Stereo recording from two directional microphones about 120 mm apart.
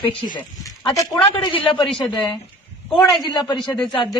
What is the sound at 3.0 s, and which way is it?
Speech, 35° left (ahead or behind).